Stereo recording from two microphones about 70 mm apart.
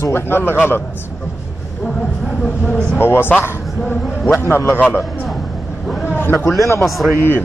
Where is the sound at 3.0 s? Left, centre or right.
Left.